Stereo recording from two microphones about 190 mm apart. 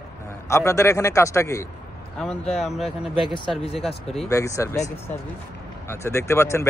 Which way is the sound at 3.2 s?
25° left (ahead or behind).